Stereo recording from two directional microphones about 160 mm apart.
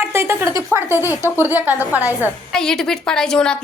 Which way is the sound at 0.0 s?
15° right (ahead or behind).